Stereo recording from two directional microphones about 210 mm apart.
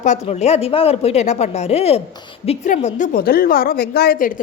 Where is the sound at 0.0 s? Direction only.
35° left (ahead or behind).